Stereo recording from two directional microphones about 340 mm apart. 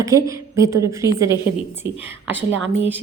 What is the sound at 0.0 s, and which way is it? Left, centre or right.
A woman's voice, centre.